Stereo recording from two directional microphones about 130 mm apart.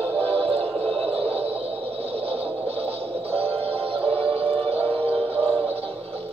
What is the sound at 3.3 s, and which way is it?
Music, 50° right (ahead or behind).